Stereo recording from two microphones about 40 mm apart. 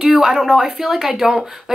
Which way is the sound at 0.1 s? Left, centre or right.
Centre.